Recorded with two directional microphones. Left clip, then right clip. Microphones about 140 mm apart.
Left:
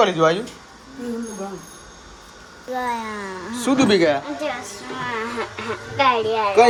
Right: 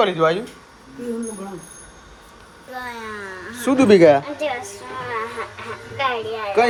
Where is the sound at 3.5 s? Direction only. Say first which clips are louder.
Right 1 dB; 10° left (ahead or behind).